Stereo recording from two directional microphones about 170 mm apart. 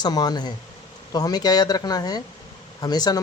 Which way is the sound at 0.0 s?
25° left (ahead or behind).